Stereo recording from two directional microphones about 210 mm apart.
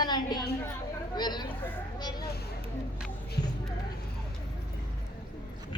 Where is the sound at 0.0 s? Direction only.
20° left (ahead or behind).